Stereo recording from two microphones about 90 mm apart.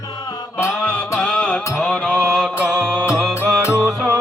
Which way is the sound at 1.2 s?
10° left (ahead or behind).